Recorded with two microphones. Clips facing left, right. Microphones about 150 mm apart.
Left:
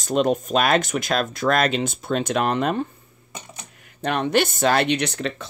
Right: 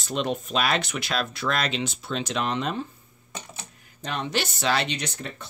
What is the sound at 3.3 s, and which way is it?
Coin, 15° left (ahead or behind).